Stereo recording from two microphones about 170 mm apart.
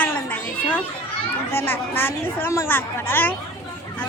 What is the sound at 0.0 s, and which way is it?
Children playing, 10° left (ahead or behind).